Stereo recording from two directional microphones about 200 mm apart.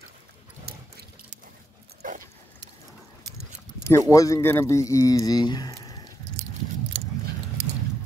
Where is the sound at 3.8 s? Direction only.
15° left (ahead or behind).